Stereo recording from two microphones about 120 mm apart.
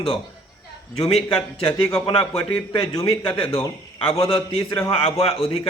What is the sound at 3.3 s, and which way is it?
A man's voice, 50° left (ahead or behind).